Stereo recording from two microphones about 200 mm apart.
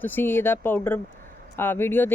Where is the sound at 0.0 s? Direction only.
10° left (ahead or behind).